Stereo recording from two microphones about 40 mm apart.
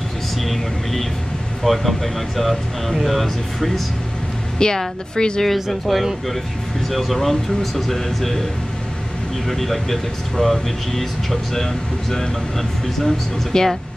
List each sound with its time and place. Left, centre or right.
0.4 s speech: centre
4.6 s a woman's voice: centre
5.4 s speech: centre
9.5 s speech: centre
13.5 s a woman's voice: centre